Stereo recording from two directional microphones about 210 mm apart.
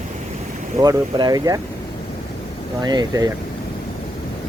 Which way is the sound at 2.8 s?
20° right (ahead or behind).